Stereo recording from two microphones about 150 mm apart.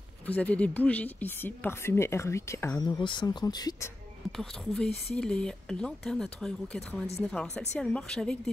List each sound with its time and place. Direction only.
0.3 s speech: 10° left (ahead or behind); by 3.9 s 25° left (ahead or behind)
4.4 s speech: 5° left (ahead or behind)